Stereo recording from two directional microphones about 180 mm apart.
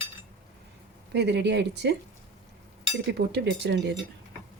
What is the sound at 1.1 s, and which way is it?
Cutlery, 70° right (ahead or behind).